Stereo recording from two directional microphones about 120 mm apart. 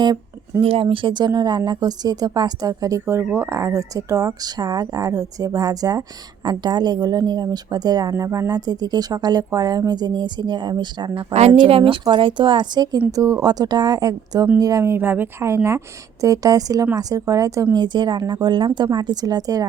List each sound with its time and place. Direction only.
0.6 s a woman's voice: 55° right (ahead or behind); by 17.7 s 25° right (ahead or behind)
17.7 s speech: 40° right (ahead or behind)